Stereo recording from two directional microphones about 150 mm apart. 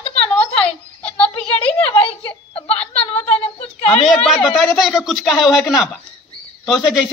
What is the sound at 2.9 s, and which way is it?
Speech, 45° left (ahead or behind).